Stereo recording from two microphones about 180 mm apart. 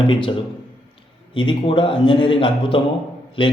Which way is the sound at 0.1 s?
30° left (ahead or behind).